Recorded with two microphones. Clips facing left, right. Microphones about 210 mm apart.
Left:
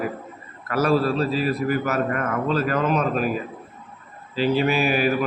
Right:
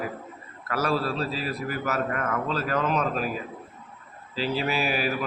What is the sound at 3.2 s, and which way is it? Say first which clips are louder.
A man's voice: left 5 dB; 60° left (ahead or behind).